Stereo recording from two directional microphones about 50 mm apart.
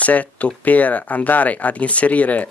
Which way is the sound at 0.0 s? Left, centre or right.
Left.